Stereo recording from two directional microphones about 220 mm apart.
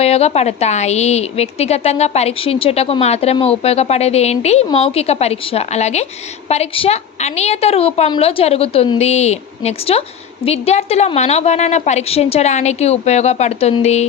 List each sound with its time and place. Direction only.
0.0 s a woman's voice: 30° left (ahead or behind)